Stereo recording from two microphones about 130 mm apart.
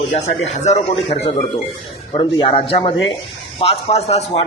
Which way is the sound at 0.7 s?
45° left (ahead or behind).